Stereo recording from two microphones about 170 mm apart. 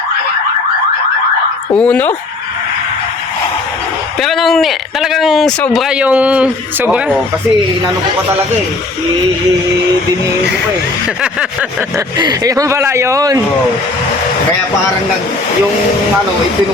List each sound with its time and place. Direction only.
1.7 s speech: 5° left (ahead or behind)
4.2 s speech: centre (ahead or behind)
11.9 s speech: 25° right (ahead or behind)